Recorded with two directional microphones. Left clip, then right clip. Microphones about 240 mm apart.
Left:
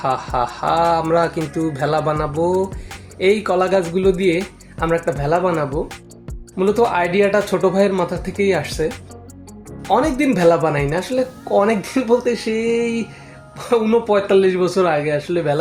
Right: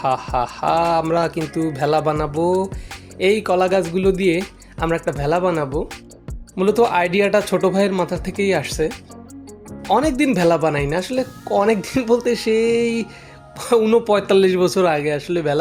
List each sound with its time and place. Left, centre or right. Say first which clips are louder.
0.0 s speech: even; right
9.9 s speech: left 1 dB; right